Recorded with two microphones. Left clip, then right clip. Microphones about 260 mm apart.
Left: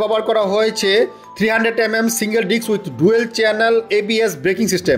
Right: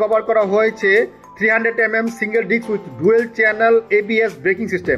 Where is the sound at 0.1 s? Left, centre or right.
Left.